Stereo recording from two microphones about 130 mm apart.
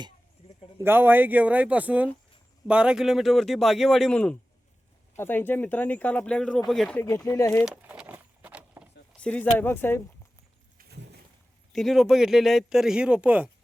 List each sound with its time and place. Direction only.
0.8 s speech: 15° right (ahead or behind); by 4.4 s 5° left (ahead or behind)
5.1 s speech: 15° left (ahead or behind)
7.0 s speech: 20° left (ahead or behind)
7.6 s keys jangling: 10° right (ahead or behind)
9.1 s speech: 10° left (ahead or behind)
11.7 s speech: centre (ahead or behind)